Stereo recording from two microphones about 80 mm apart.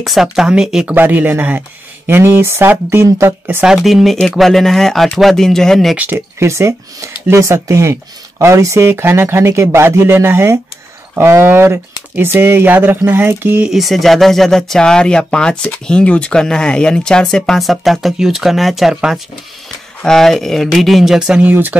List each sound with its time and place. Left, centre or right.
0.0 s speech: centre
0.8 s speech: right
3.6 s speech: centre
5.9 s speech: right
6.4 s speech: right
13.7 s speech: centre
21.5 s speech: right